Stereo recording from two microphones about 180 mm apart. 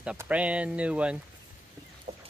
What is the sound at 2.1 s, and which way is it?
Fowl, 40° right (ahead or behind).